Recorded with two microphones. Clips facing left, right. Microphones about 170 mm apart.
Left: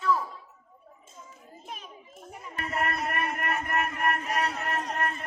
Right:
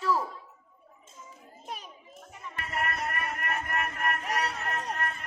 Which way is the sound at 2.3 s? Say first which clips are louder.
Left 3 dB; 40° left (ahead or behind).